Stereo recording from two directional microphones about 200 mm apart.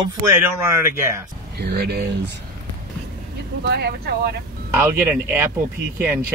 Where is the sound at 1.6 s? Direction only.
55° right (ahead or behind).